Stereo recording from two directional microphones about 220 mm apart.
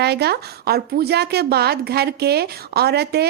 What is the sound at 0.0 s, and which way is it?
A woman's voice, 50° right (ahead or behind).